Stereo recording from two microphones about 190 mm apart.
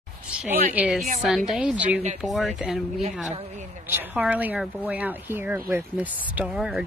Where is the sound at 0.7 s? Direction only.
5° right (ahead or behind).